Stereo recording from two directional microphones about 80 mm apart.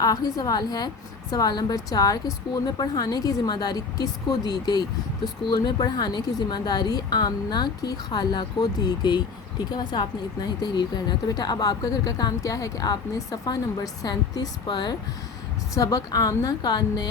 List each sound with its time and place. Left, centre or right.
0.0 s a woman's voice: left
15.7 s a woman's voice: left